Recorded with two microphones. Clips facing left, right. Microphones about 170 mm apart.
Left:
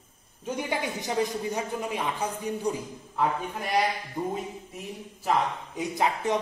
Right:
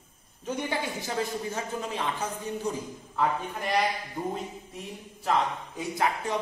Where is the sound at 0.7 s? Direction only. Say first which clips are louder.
Left 2 dB; 20° left (ahead or behind).